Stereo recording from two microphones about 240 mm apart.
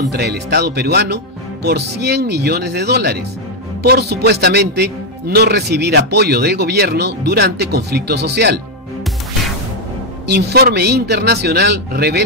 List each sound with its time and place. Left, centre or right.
0.1 s a man's voice: right
10.2 s a man's voice: right